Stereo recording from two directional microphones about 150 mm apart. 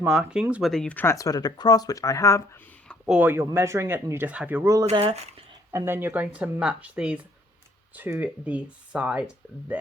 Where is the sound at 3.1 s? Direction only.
10° right (ahead or behind).